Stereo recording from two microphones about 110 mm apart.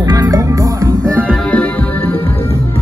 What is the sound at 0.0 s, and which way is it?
Music, 35° right (ahead or behind).